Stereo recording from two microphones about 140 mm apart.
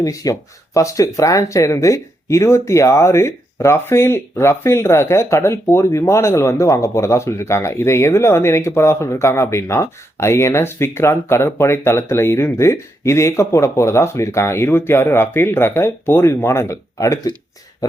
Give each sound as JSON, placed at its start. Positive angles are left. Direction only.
{"t": 0.0, "sound": "speech", "side_deg": 25}